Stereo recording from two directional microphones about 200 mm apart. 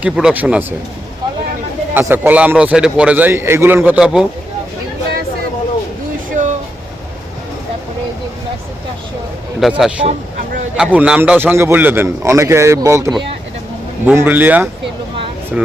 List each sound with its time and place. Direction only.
0.0 s speech: 5° right (ahead or behind)
1.9 s a man's voice: 10° right (ahead or behind)
6.4 s a sound: 35° right (ahead or behind)
9.6 s a man's voice: centre (ahead or behind)